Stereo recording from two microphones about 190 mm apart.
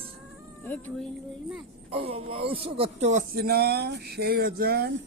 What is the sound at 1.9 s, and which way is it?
Speech, 30° right (ahead or behind).